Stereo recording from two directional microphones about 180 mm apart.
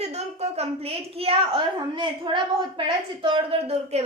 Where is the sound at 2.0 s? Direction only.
25° right (ahead or behind).